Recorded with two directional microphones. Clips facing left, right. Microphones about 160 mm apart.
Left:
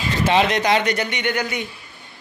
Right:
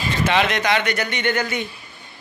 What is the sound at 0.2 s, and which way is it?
Speech, 35° left (ahead or behind).